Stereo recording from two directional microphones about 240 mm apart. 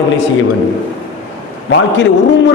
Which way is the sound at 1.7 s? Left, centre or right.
Left.